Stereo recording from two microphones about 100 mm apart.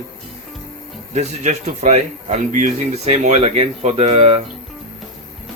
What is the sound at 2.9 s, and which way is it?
Speech, 90° right.